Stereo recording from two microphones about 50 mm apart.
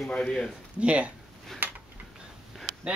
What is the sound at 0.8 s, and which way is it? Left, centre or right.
Speech, right.